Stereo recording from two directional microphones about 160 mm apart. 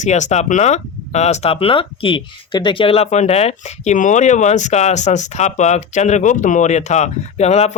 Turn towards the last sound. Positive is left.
turn(degrees=45)  # may be behind; listen again after turning